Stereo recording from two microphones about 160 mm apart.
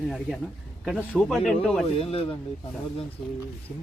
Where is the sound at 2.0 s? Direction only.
35° left (ahead or behind).